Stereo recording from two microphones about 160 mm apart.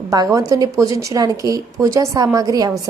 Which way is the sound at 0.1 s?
20° right (ahead or behind).